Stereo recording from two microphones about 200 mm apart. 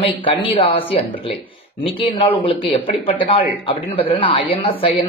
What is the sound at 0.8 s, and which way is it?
Speech, 25° left (ahead or behind).